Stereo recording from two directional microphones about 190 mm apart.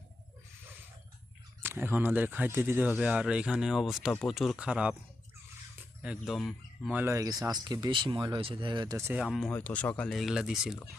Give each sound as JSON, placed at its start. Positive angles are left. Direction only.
{"t": 1.6, "sound": "speech", "side_deg": -10}
{"t": 7.0, "sound": "speech", "side_deg": -15}
{"t": 9.2, "sound": "speech", "side_deg": 0}